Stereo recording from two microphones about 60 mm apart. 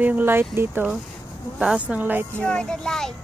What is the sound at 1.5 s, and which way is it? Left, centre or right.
Speech, centre.